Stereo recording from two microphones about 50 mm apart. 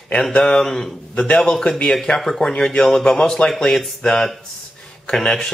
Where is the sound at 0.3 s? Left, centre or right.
Left.